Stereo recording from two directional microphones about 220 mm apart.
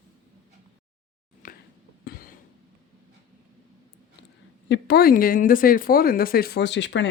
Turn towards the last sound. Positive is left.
turn(degrees=55)  # may be behind; listen again after turning